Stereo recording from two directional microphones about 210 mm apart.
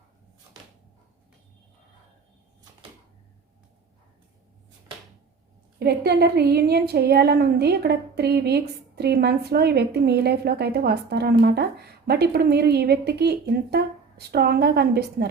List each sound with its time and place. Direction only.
5.8 s a woman's voice: 50° right (ahead or behind)